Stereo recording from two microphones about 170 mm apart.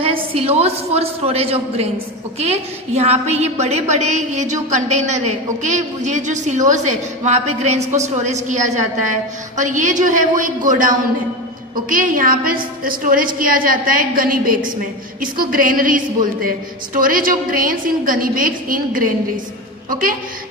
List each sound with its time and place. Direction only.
0.0 s a woman's voice: 35° right (ahead or behind); by 20.2 s 55° right (ahead or behind)